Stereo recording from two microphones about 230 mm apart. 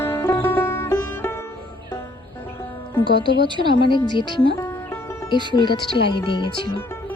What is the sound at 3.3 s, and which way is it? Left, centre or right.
Speech, centre.